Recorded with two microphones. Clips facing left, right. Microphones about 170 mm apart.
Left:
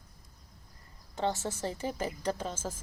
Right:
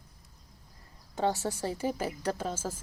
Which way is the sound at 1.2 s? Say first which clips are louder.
Right 2 dB; 10° right (ahead or behind).